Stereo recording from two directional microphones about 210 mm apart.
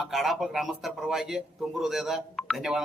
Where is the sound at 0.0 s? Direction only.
Centre (ahead or behind).